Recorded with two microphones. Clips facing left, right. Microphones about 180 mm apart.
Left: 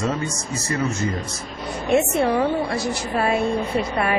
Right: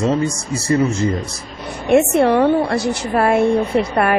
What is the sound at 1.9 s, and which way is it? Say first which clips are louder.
A woman's voice: right 6 dB; 70° right (ahead or behind).